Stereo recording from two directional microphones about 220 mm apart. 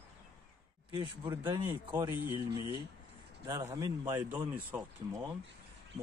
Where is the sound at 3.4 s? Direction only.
15° right (ahead or behind).